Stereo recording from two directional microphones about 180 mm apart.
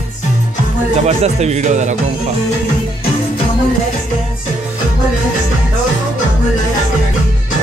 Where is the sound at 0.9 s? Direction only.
40° right (ahead or behind).